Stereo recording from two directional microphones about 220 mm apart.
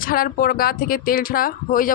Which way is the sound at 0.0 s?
40° left (ahead or behind).